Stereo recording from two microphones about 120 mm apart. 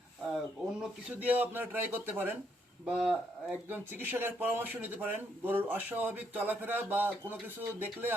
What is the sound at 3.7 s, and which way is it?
Speech, 15° right (ahead or behind).